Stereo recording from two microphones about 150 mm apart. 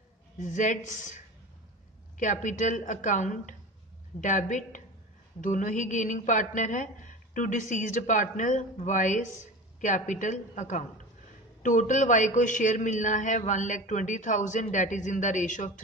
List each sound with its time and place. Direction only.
0.4 s a man's voice: 55° left (ahead or behind)